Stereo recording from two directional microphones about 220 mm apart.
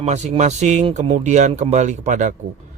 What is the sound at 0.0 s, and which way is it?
A man's voice, 30° right (ahead or behind).